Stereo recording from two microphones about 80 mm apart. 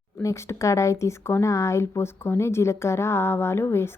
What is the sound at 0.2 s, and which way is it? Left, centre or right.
A woman's voice, left.